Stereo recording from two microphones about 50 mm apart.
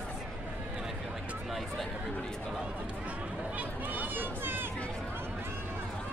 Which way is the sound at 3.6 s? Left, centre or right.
Right.